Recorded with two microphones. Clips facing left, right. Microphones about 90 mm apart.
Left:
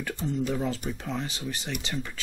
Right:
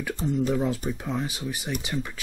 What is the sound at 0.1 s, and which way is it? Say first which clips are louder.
Speech: right 4 dB; 35° right (ahead or behind).